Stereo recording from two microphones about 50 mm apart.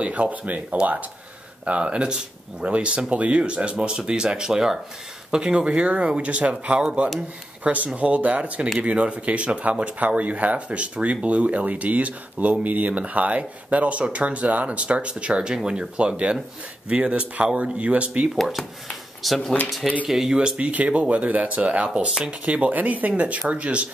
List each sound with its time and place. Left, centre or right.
0.0 s speech: right
18.3 s speech: centre
20.1 s speech: centre
20.3 s speech: right